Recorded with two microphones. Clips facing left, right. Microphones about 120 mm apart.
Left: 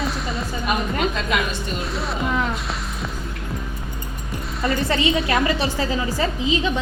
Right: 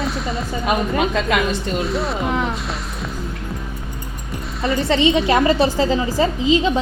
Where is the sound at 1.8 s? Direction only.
Centre (ahead or behind).